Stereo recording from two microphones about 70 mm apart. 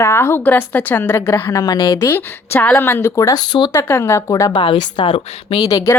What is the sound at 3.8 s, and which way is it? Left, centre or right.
Speech, left.